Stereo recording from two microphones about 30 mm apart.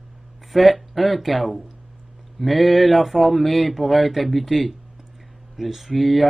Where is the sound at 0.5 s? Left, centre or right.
Centre.